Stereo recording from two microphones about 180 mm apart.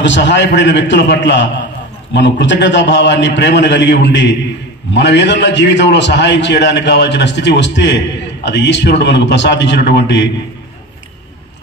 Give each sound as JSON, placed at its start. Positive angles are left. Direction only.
{"t": 0.0, "sound": "a man's voice", "side_deg": 80}